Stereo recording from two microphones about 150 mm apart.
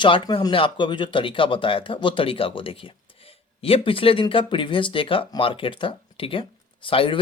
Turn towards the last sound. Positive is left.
turn(degrees=35)  # may be behind; listen again after turning